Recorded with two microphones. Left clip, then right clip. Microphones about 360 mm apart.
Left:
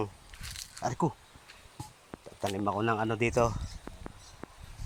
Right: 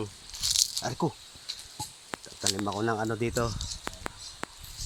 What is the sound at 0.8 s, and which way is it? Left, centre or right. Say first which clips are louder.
Speech: right 1 dB; centre.